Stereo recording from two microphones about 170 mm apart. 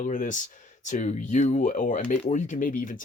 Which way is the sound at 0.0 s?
50° left (ahead or behind).